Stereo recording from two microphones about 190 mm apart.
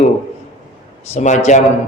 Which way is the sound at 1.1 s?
35° left (ahead or behind).